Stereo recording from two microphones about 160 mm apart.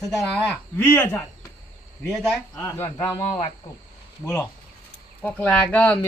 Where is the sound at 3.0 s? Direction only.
20° left (ahead or behind).